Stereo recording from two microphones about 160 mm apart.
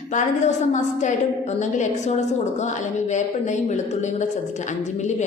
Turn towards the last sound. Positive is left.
turn(degrees=50)  # may be behind; listen again after turning